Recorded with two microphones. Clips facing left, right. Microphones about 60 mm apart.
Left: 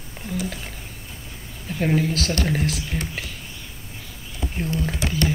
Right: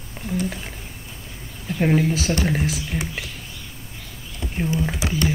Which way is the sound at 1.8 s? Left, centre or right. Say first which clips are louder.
Right 2 dB; centre.